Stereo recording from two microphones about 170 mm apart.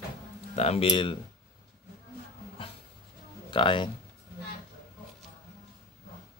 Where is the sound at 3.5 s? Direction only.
30° left (ahead or behind).